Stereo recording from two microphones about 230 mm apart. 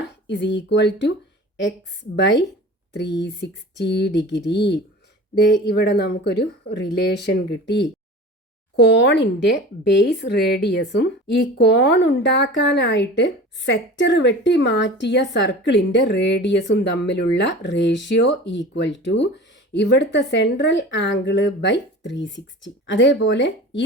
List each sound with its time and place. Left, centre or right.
0.3 s speech: left
2.1 s speech: left